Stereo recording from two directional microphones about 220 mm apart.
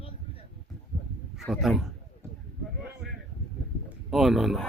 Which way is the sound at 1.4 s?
Centre (ahead or behind).